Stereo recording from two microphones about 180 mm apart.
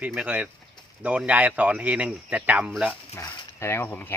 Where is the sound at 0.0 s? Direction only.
5° right (ahead or behind).